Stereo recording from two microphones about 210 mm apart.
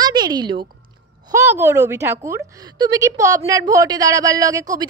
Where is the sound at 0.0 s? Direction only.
20° right (ahead or behind).